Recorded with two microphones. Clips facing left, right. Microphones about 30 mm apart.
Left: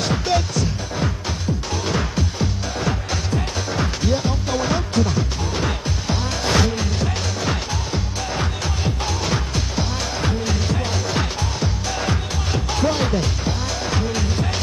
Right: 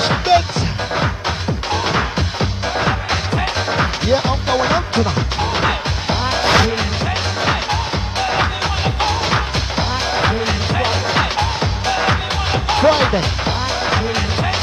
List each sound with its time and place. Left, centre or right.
0.0 s music: right